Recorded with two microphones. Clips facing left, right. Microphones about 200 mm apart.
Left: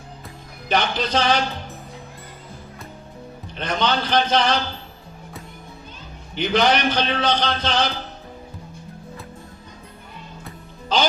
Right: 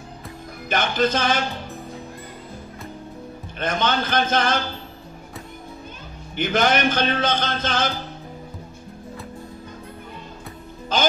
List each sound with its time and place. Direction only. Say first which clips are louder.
0.7 s a man's voice: right 1 dB; 50° right (ahead or behind)
3.5 s a man's voice: even; 50° right (ahead or behind)
6.3 s a man's voice: left 1 dB; 50° right (ahead or behind)